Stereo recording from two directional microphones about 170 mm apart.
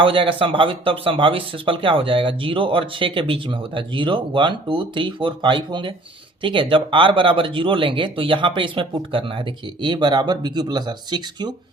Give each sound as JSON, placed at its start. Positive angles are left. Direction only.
{"t": 0.0, "sound": "speech", "side_deg": -30}